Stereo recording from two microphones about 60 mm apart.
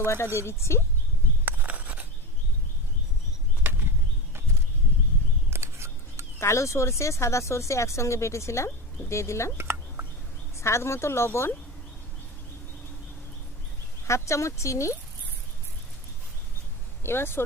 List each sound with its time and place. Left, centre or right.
0.0 s a woman's voice: left
1.5 s a sound: right
3.6 s a sound: right
5.5 s scissors: right
6.4 s a woman's voice: left
9.6 s a sound: right
10.6 s a woman's voice: left
14.1 s speech: left
17.0 s speech: left